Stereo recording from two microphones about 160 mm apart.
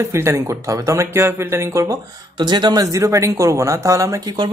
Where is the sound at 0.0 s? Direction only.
15° right (ahead or behind).